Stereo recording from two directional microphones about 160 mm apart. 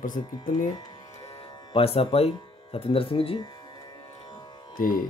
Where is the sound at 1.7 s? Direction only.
35° left (ahead or behind).